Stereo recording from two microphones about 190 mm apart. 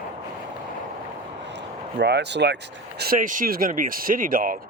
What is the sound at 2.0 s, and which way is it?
Speech, 65° right (ahead or behind).